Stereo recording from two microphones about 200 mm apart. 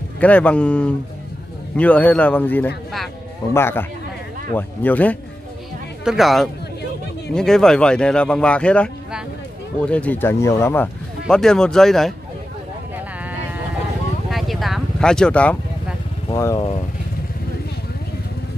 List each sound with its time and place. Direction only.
0.2 s a man's voice: 5° left (ahead or behind)
12.9 s sheep: 10° right (ahead or behind)
14.3 s vehicle: centre (ahead or behind)
16.3 s speech: 20° left (ahead or behind)